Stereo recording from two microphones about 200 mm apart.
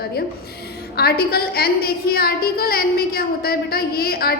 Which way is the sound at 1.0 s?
50° left (ahead or behind).